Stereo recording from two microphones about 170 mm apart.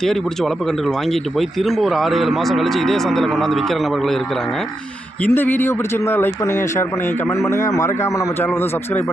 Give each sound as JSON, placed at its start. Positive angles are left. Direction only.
{"t": 0.0, "sound": "speech", "side_deg": 0}
{"t": 5.2, "sound": "a man's voice", "side_deg": 10}